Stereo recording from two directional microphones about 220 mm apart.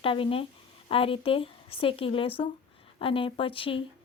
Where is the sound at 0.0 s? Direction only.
25° left (ahead or behind).